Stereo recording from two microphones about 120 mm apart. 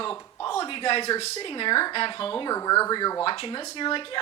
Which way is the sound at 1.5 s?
45° left (ahead or behind).